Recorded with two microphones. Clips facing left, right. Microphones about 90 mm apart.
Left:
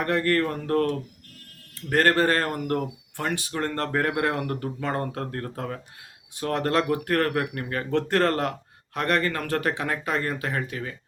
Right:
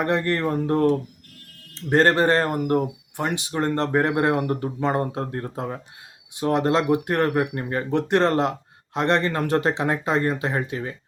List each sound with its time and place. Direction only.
0.0 s speech: 20° right (ahead or behind)